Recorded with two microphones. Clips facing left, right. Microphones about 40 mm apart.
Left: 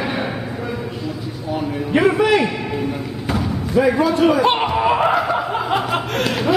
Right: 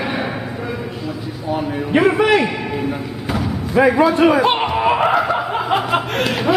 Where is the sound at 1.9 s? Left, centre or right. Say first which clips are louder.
Right 1 dB; centre.